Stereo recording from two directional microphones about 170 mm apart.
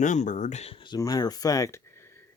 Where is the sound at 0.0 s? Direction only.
45° left (ahead or behind).